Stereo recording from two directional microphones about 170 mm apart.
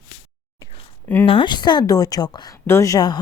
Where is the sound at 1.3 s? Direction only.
30° left (ahead or behind).